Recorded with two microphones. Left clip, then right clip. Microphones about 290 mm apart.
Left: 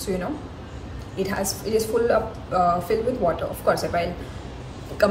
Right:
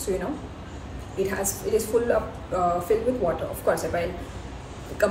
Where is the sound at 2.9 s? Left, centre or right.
Centre.